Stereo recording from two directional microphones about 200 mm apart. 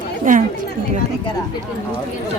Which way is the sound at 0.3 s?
40° right (ahead or behind).